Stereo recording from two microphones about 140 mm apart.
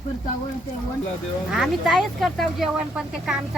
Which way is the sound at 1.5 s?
Centre (ahead or behind).